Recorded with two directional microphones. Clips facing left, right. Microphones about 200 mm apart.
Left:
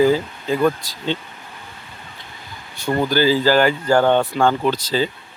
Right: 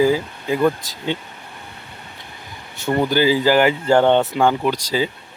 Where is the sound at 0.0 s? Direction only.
15° right (ahead or behind).